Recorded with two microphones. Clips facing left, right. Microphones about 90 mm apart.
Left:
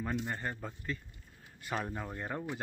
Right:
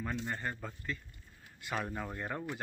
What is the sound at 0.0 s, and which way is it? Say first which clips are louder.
Speech: left 1 dB; 15° left (ahead or behind).